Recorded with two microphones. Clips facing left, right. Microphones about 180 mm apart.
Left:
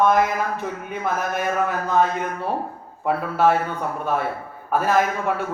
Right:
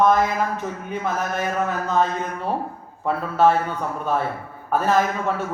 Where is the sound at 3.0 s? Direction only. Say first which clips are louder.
Right 1 dB; 10° left (ahead or behind).